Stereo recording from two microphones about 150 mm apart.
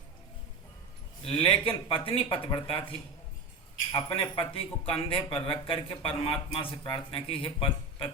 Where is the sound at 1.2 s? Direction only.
35° left (ahead or behind).